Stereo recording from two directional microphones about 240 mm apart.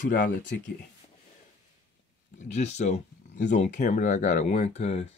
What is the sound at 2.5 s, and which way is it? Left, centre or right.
Speech, left.